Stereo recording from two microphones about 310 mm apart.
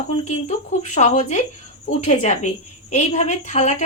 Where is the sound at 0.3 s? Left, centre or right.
Left.